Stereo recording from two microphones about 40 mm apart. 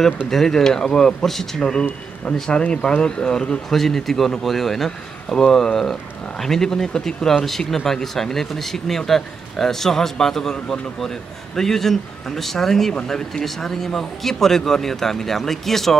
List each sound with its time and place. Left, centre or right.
0.3 s speech: centre
1.6 s speech: left
3.7 s speech: centre